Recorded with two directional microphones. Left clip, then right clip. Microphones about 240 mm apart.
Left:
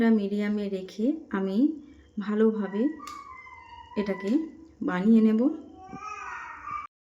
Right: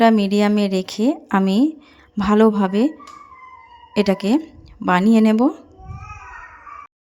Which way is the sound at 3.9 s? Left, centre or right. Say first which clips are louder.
Right 10 dB; right.